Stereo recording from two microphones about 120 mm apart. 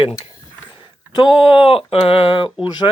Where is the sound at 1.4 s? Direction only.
50° left (ahead or behind).